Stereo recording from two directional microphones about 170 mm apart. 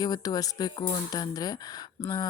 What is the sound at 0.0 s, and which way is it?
Speech, 20° left (ahead or behind).